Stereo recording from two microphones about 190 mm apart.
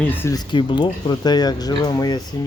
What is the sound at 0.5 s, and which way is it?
Speech, 25° left (ahead or behind).